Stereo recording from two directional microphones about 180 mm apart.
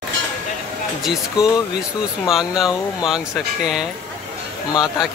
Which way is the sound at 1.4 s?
5° right (ahead or behind).